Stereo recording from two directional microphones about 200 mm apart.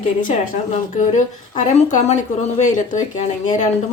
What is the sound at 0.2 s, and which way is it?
A woman's voice, 40° left (ahead or behind).